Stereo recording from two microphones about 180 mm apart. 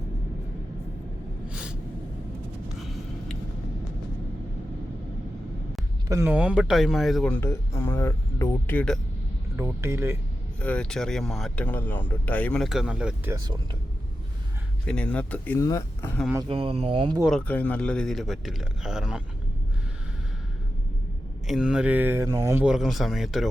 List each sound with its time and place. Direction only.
1.5 s a sound: 5° right (ahead or behind)
6.1 s speech: 15° right (ahead or behind); by 9.0 s 10° left (ahead or behind)
9.6 s speech: 15° right (ahead or behind)
10.6 s speech: 5° left (ahead or behind)
13.3 s speech: 25° right (ahead or behind)
14.8 s speech: 5° left (ahead or behind)
16.5 s speech: 30° right (ahead or behind)
17.2 s speech: 5° left (ahead or behind)
21.4 s speech: 5° right (ahead or behind)
22.6 s speech: 5° right (ahead or behind)